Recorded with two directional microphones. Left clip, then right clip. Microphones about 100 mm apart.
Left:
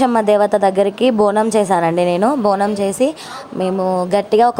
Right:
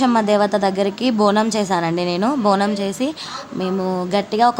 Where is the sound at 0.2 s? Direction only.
50° left (ahead or behind).